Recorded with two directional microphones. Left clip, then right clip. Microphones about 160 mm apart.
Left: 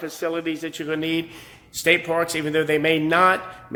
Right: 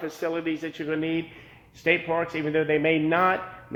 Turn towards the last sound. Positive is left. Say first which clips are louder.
# left 4 dB
turn(degrees=25)  # may be behind; listen again after turning